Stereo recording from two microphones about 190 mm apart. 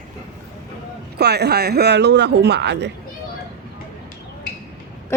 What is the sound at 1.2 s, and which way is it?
Speech, 60° right (ahead or behind).